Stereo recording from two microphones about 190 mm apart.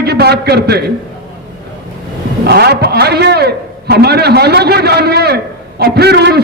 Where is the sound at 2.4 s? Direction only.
60° right (ahead or behind).